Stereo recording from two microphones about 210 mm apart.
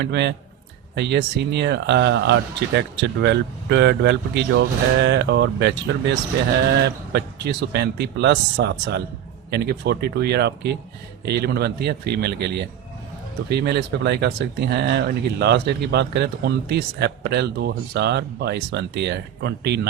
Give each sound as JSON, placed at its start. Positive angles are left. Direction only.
{"t": 0.0, "sound": "speech", "side_deg": -55}